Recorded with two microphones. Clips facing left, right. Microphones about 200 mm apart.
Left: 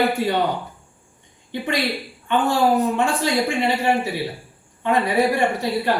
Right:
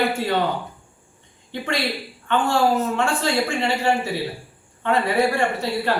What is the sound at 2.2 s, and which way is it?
A man's voice, 15° left (ahead or behind).